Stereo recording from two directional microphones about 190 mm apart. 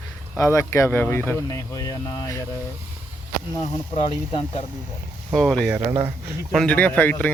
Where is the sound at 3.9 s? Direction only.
25° left (ahead or behind).